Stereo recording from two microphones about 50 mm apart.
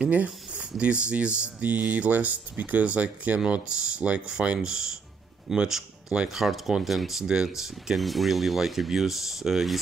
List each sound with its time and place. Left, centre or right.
0.0 s speech: right
5.7 s a sound: centre
6.2 s speech: centre